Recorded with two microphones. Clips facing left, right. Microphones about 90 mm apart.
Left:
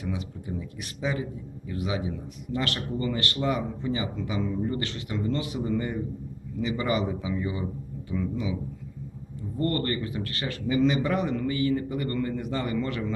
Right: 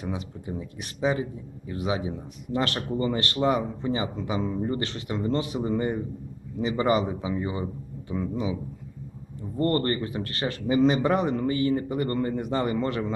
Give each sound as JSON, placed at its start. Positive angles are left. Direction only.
{"t": 0.0, "sound": "speech", "side_deg": -30}
{"t": 9.6, "sound": "speech", "side_deg": -35}